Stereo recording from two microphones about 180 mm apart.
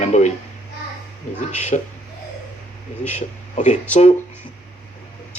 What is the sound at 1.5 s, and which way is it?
Speech, 40° left (ahead or behind).